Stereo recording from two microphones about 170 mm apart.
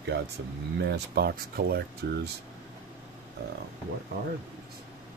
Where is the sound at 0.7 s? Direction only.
80° right.